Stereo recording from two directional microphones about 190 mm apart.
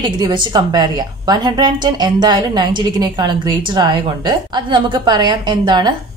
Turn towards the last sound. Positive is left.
turn(degrees=-25)  # may be behind; listen again after turning